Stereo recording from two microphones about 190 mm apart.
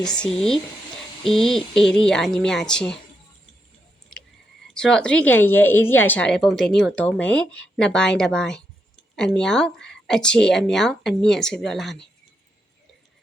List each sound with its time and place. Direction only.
0.0 s speech: 5° left (ahead or behind)
4.7 s speech: 5° left (ahead or behind)